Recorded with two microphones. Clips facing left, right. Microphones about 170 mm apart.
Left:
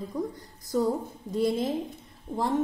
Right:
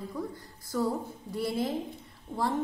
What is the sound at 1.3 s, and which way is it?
Speech, 20° left (ahead or behind).